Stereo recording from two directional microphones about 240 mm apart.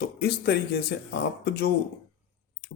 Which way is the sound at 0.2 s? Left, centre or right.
Left.